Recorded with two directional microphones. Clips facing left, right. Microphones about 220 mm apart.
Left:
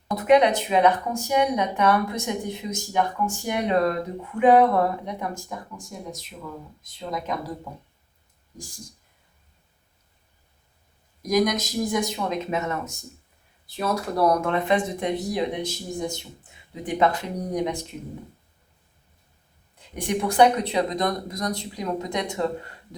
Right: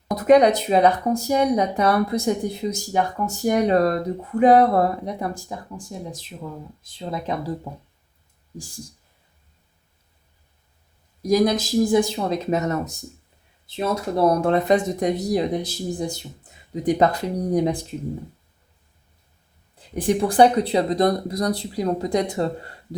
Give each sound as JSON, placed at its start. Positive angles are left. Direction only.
{"t": 0.1, "sound": "speech", "side_deg": -40}
{"t": 11.2, "sound": "speech", "side_deg": -30}
{"t": 13.7, "sound": "speech", "side_deg": -25}
{"t": 20.0, "sound": "speech", "side_deg": -30}